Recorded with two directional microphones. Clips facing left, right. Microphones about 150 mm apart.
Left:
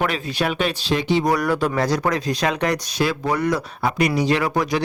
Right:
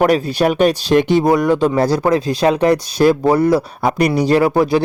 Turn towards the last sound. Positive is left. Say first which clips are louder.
# right 7 dB
turn(degrees=-30)  # may be behind; listen again after turning